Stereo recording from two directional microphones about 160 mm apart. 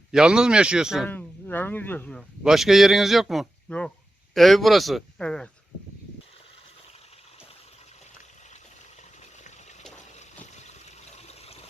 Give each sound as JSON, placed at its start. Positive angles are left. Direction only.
{"t": 0.1, "sound": "speech", "side_deg": -5}
{"t": 1.0, "sound": "speech", "side_deg": 10}
{"t": 2.4, "sound": "speech", "side_deg": -5}
{"t": 10.4, "sound": "a sound", "side_deg": 45}